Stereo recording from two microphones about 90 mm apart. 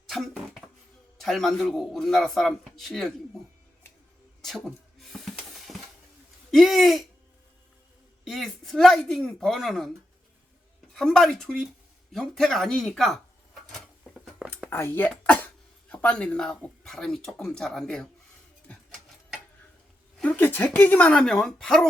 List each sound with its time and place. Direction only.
0.1 s a sound: centre (ahead or behind)
1.2 s a man's voice: centre (ahead or behind)
4.4 s a sound: centre (ahead or behind)
6.5 s a man's voice: centre (ahead or behind)
8.2 s a man's voice: centre (ahead or behind)
10.9 s speech: 5° left (ahead or behind)
14.1 s a sound: 10° right (ahead or behind)
14.7 s speech: 25° left (ahead or behind)
15.1 s speech: 10° left (ahead or behind)
20.2 s speech: 20° left (ahead or behind)